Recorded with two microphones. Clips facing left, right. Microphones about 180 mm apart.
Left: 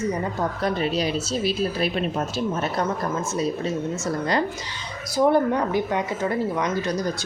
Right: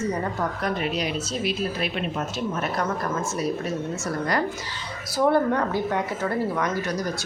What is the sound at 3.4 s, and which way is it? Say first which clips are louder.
A woman's voice: left 4 dB; 25° left (ahead or behind).